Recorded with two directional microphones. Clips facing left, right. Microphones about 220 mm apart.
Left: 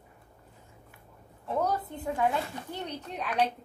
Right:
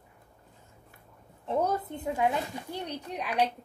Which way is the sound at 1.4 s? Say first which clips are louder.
Right 1 dB; 20° right (ahead or behind).